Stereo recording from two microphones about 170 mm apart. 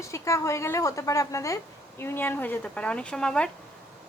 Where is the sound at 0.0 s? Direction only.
15° left (ahead or behind).